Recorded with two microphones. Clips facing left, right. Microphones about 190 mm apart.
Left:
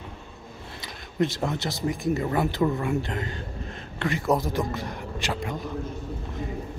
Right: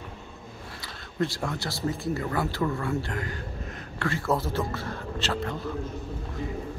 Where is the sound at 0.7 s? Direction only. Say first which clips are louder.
Left 3 dB; 20° left (ahead or behind).